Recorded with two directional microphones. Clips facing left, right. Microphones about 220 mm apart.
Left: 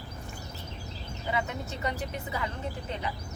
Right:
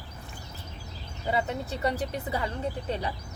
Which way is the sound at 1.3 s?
35° right (ahead or behind).